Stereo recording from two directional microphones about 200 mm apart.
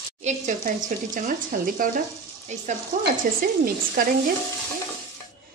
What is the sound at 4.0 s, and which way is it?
Speech, 45° right (ahead or behind).